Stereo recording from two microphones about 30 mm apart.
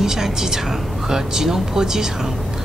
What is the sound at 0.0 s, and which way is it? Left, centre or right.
Speech, centre.